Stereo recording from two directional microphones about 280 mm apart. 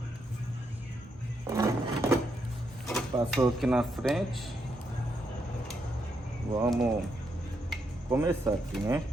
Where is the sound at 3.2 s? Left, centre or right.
Centre.